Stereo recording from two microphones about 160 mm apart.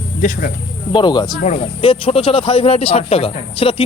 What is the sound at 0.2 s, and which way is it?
Speech, 55° left (ahead or behind).